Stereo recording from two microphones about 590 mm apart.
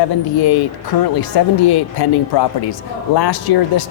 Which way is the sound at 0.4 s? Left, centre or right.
Left.